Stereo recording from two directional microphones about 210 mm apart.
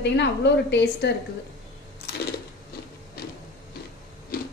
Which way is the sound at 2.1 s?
50° left (ahead or behind).